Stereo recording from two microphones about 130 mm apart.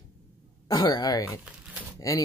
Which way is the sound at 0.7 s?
30° left (ahead or behind).